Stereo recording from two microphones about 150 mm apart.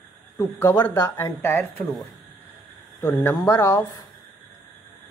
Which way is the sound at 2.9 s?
15° left (ahead or behind).